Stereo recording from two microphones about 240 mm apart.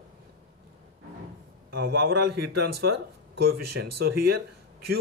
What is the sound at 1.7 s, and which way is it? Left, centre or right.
A man's voice, right.